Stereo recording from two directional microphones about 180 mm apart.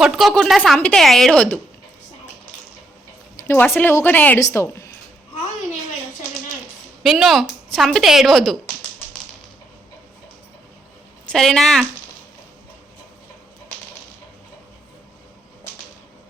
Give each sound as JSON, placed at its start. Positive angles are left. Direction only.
{"t": 0.0, "sound": "a woman's voice", "side_deg": 0}
{"t": 3.3, "sound": "speech", "side_deg": 15}
{"t": 7.0, "sound": "a woman's voice", "side_deg": 0}
{"t": 11.3, "sound": "a woman's voice", "side_deg": 5}